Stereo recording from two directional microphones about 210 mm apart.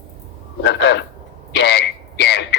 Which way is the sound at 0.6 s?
55° left (ahead or behind).